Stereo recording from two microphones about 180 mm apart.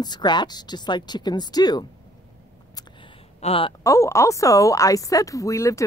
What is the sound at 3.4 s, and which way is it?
Speech, 30° left (ahead or behind).